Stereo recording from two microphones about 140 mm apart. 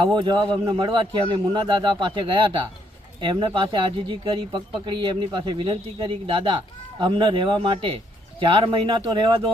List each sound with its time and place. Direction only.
0.0 s speech: 35° right (ahead or behind)